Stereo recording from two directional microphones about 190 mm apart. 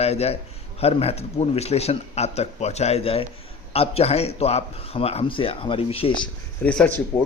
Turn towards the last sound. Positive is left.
turn(degrees=10)  # may be behind; listen again after turning